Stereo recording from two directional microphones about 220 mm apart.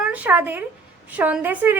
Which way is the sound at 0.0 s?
5° right (ahead or behind).